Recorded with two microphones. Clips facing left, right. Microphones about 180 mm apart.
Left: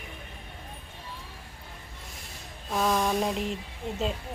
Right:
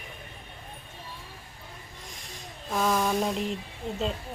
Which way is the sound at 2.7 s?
Centre (ahead or behind).